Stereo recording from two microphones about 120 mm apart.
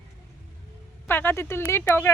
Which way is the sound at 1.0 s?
15° left (ahead or behind).